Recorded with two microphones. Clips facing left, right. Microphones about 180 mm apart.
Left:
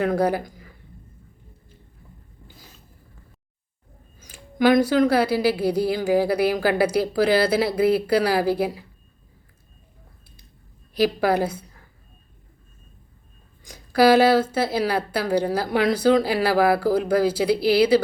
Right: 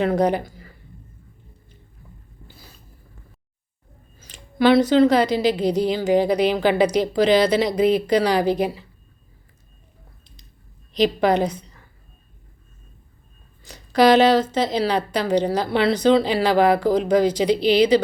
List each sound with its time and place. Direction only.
0.2 s speech: 5° left (ahead or behind)
4.2 s a woman's voice: 10° left (ahead or behind)
10.9 s a woman's voice: 5° left (ahead or behind)
13.7 s a woman's voice: 10° left (ahead or behind)